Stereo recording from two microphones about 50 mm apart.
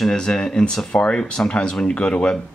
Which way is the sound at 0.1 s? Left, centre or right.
Centre.